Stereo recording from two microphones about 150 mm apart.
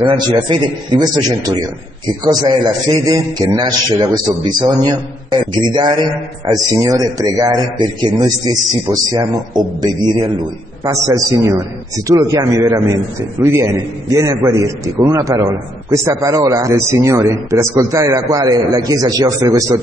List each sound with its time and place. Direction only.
0.3 s a man's voice: 30° right (ahead or behind)